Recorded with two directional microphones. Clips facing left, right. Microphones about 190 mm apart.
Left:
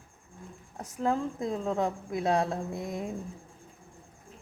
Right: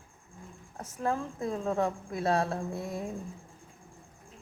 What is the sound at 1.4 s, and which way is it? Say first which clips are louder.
Speech: even; 15° left (ahead or behind).